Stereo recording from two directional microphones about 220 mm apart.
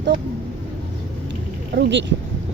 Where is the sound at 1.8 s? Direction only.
55° right (ahead or behind).